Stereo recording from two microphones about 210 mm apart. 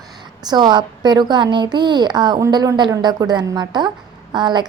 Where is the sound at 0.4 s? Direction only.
20° right (ahead or behind).